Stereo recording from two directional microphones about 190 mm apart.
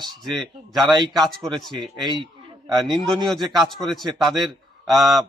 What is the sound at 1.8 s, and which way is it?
Speech, 25° right (ahead or behind).